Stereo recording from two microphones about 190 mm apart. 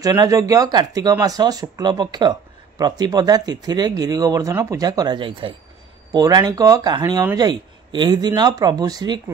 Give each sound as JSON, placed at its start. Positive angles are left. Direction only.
{"t": 0.0, "sound": "speech", "side_deg": -20}